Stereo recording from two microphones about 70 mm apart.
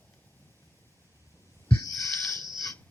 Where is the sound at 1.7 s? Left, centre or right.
Left.